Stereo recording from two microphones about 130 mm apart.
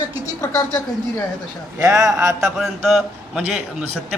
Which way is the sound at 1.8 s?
25° right (ahead or behind).